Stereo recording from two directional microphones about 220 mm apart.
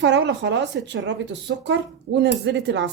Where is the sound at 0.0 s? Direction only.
55° right (ahead or behind).